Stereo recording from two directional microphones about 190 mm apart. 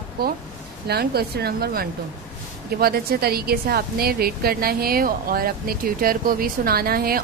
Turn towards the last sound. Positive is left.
turn(degrees=-50)  # may be behind; listen again after turning